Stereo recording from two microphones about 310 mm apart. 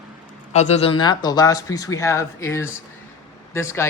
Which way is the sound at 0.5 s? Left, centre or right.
Left.